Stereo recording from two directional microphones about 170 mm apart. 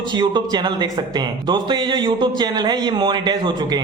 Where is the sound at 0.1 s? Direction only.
25° right (ahead or behind).